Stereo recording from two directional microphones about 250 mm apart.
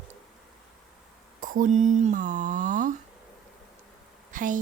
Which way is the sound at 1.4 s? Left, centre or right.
Right.